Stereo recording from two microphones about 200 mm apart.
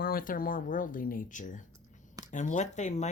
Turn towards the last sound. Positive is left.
turn(degrees=35)  # may be behind; listen again after turning